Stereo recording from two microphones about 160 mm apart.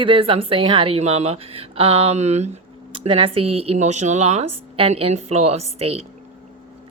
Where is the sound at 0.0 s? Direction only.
35° right (ahead or behind).